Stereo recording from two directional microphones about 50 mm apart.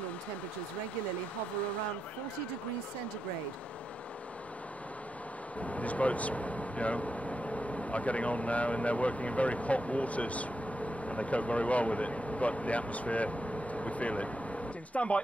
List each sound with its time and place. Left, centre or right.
5.6 s speech: left